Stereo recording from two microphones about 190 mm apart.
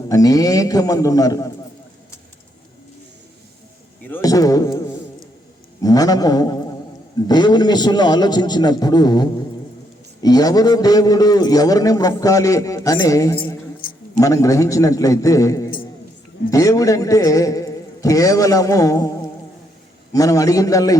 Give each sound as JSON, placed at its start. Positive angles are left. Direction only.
{"t": 0.1, "sound": "a man's voice", "side_deg": 20}
{"t": 4.0, "sound": "a man's voice", "side_deg": 15}
{"t": 5.8, "sound": "a man's voice", "side_deg": 20}
{"t": 13.8, "sound": "a sound", "side_deg": 50}
{"t": 14.2, "sound": "speech", "side_deg": 15}
{"t": 20.1, "sound": "speech", "side_deg": 20}